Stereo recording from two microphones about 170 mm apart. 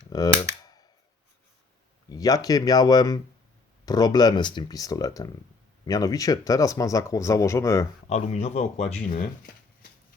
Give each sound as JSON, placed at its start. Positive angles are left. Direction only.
{"t": 0.1, "sound": "cap gun", "side_deg": 20}
{"t": 2.0, "sound": "speech", "side_deg": 20}
{"t": 8.1, "sound": "speech", "side_deg": 40}
{"t": 9.0, "sound": "speech", "side_deg": 55}